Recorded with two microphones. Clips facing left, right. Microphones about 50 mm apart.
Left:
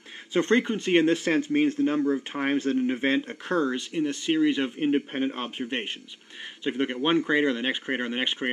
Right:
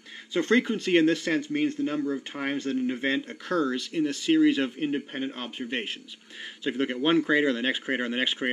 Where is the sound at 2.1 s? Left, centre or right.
Left.